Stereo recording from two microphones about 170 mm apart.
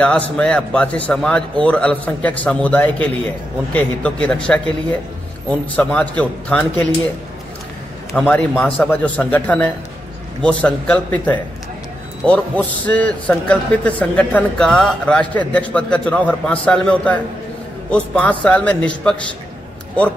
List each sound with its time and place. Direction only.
0.0 s a man's voice: 5° left (ahead or behind)
8.1 s a man's voice: 5° left (ahead or behind)